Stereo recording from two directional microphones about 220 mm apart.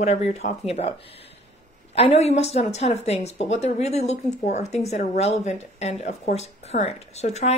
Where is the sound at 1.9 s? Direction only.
30° left (ahead or behind).